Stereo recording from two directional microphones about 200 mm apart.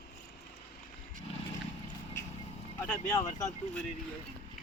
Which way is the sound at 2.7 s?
10° left (ahead or behind).